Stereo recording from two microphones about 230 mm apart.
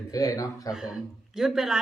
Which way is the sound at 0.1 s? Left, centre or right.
Centre.